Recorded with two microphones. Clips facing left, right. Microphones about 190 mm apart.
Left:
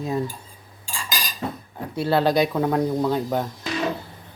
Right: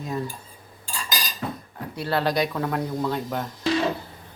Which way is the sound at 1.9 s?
25° left (ahead or behind).